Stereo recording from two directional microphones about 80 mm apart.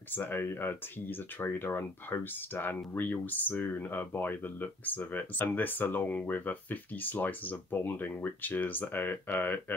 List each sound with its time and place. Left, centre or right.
0.1 s speech: left